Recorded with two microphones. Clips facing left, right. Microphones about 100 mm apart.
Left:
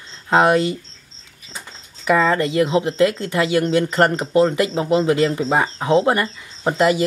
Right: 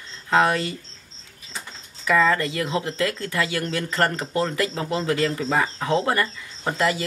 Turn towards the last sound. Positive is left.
turn(degrees=20)  # may be behind; listen again after turning